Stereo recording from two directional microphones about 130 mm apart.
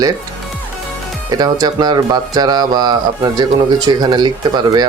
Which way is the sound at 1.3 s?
30° right (ahead or behind).